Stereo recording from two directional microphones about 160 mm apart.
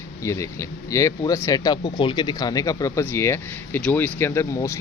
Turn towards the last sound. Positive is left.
turn(degrees=15)  # may be behind; listen again after turning